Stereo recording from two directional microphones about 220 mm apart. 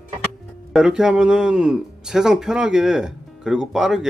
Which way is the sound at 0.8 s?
5° right (ahead or behind).